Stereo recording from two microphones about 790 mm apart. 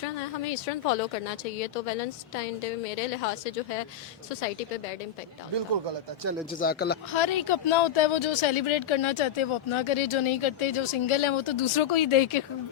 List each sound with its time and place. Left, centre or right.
1.5 s a woman's voice: left
6.6 s speech: centre
7.1 s speech: left